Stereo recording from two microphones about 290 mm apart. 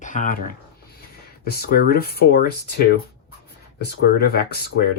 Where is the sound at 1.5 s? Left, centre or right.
Left.